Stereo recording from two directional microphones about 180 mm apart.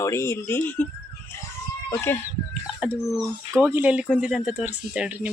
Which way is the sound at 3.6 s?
10° right (ahead or behind).